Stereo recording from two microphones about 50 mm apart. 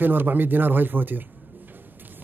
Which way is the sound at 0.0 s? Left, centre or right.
Right.